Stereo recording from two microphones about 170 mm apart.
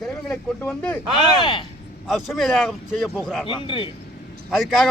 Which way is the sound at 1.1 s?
25° left (ahead or behind).